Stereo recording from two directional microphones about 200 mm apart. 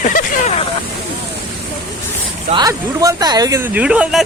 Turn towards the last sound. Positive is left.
turn(degrees=-5)  # may be behind; listen again after turning